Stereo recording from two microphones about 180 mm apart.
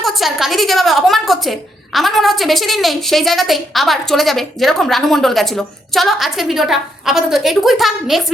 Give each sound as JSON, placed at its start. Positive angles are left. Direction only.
{"t": 0.0, "sound": "a woman's voice", "side_deg": 0}